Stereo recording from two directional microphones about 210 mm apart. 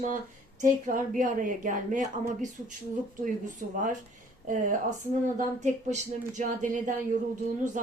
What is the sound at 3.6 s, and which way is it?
Speech, 40° right (ahead or behind).